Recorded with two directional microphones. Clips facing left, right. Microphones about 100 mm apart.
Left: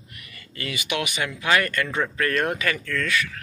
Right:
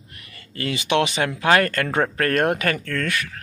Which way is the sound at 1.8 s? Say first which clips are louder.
Right 3 dB; 50° right (ahead or behind).